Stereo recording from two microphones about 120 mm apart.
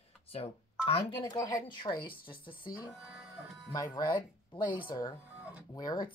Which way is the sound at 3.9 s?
35° left (ahead or behind).